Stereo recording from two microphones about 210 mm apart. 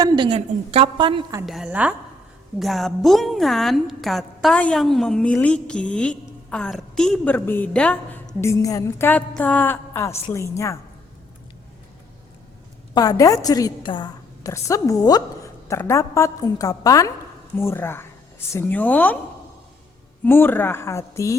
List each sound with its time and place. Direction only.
0.0 s a woman's voice: 25° right (ahead or behind)
1.5 s a woman's voice: centre (ahead or behind); by 10.8 s 15° left (ahead or behind)
12.9 s a woman's voice: 15° left (ahead or behind)
20.2 s a woman's voice: 10° left (ahead or behind)